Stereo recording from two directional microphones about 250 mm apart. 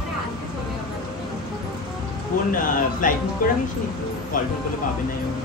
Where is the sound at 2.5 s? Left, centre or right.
Left.